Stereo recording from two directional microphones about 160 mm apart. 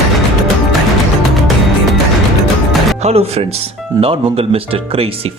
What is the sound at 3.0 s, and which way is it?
Speech, 40° right (ahead or behind).